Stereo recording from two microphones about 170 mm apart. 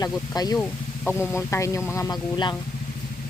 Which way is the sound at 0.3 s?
20° left (ahead or behind).